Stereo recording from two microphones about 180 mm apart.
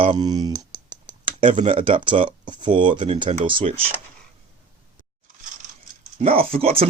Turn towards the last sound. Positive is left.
turn(degrees=-30)  # may be behind; listen again after turning